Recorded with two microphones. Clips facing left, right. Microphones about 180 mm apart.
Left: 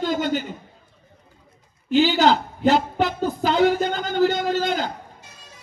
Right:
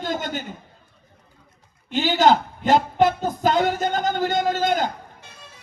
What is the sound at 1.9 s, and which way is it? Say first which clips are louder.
A woman's voice: left 1 dB; 45° right (ahead or behind).